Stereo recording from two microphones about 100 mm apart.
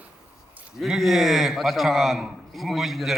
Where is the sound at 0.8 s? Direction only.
Centre (ahead or behind).